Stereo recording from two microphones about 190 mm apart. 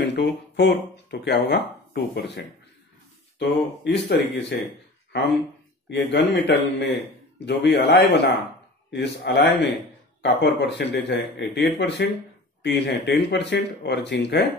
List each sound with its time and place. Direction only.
0.0 s speech: 65° left (ahead or behind)
5.9 s speech: 70° left (ahead or behind)